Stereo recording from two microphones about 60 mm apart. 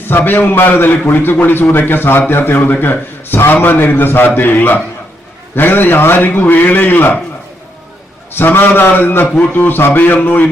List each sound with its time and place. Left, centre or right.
0.0 s a man's voice: left
8.3 s a man's voice: left